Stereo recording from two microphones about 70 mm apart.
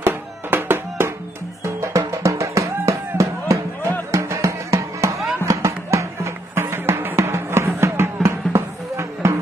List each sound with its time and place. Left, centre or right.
0.0 s music: right
1.6 s music: right